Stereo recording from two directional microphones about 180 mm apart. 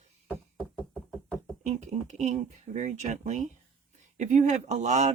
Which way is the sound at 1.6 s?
40° right (ahead or behind).